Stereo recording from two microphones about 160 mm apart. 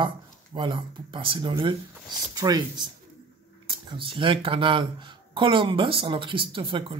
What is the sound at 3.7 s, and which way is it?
Speech, 30° right (ahead or behind).